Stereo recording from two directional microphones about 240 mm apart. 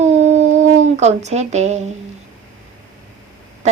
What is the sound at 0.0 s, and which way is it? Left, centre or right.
Howl, right.